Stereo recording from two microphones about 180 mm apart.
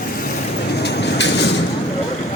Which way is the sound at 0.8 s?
70° left (ahead or behind).